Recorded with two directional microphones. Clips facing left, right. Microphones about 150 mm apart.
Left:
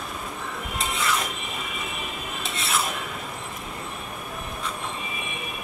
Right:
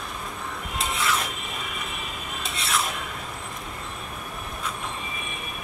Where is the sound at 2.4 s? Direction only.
Centre (ahead or behind).